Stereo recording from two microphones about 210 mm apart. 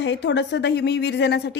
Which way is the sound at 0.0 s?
60° left (ahead or behind).